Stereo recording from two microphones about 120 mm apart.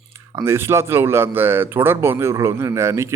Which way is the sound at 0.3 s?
20° right (ahead or behind).